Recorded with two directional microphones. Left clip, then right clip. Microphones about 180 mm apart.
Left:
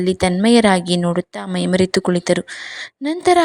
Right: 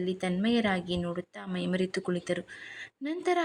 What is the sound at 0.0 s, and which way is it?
A woman's voice, 40° left (ahead or behind).